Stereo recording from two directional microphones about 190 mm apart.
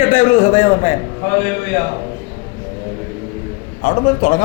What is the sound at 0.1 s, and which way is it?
Speech, 40° left (ahead or behind).